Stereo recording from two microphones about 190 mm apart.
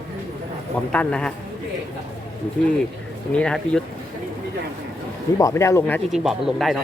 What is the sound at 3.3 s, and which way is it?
Speech, 5° left (ahead or behind).